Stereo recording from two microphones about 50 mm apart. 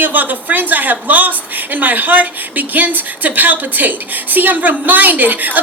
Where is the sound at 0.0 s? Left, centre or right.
Right.